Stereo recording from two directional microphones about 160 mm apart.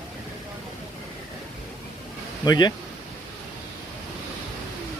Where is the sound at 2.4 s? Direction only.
25° left (ahead or behind).